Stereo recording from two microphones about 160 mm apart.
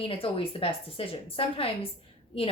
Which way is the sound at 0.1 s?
35° left (ahead or behind).